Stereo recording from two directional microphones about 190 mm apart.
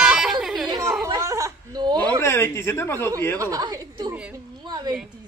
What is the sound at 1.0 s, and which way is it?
Snicker, 15° right (ahead or behind).